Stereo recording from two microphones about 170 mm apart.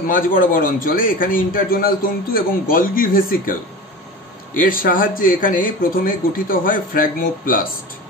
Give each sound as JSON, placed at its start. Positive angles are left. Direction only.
{"t": 0.0, "sound": "a man's voice", "side_deg": 55}
{"t": 4.6, "sound": "a man's voice", "side_deg": 55}